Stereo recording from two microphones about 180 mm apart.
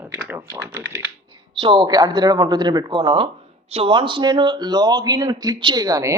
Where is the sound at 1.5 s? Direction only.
25° right (ahead or behind).